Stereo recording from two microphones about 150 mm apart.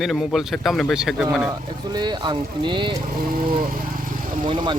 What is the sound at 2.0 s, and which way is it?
Speech, 30° right (ahead or behind).